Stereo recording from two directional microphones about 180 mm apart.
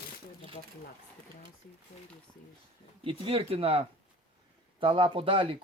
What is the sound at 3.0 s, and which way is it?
Speech, 30° right (ahead or behind).